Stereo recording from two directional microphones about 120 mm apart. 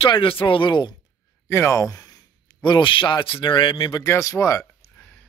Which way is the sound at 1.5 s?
25° left (ahead or behind).